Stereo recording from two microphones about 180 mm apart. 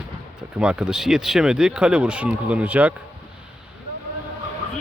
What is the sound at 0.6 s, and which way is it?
Speech, 5° right (ahead or behind).